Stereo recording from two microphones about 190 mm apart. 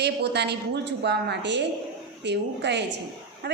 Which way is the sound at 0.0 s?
60° right (ahead or behind).